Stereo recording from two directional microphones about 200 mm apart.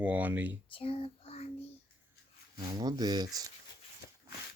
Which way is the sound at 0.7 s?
30° left (ahead or behind).